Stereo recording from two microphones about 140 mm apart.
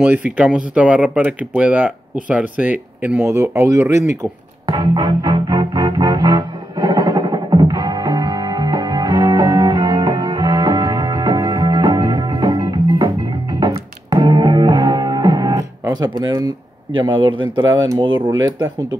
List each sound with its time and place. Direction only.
0.0 s speech: 10° right (ahead or behind)
4.2 s music: 25° right (ahead or behind)
16.2 s speech: 25° right (ahead or behind)